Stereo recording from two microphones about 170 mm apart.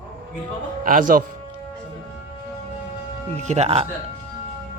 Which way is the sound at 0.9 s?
55° right (ahead or behind).